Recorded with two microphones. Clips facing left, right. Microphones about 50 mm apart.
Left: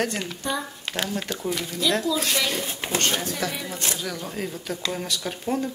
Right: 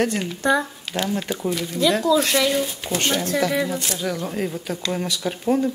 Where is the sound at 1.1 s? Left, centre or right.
Centre.